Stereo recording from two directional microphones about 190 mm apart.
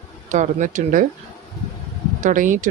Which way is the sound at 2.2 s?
40° right (ahead or behind).